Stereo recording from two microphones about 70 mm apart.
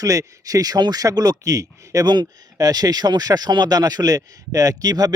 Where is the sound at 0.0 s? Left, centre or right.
Right.